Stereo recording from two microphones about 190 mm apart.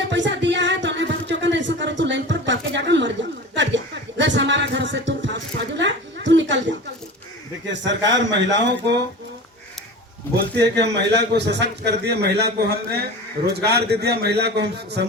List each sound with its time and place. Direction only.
0.1 s music: 70° right (ahead or behind)
3.5 s chuckle: 70° right (ahead or behind)
4.2 s a sound: 70° right (ahead or behind)
7.7 s a man's voice: 70° right (ahead or behind)
10.3 s a man's voice: 60° right (ahead or behind)